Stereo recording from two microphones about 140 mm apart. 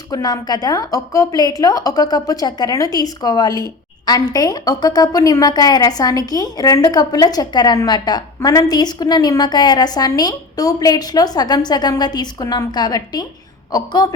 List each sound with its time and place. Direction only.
0.1 s a woman's voice: 30° left (ahead or behind)